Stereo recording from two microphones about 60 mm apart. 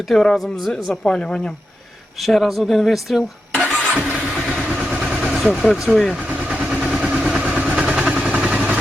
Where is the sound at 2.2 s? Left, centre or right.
Centre.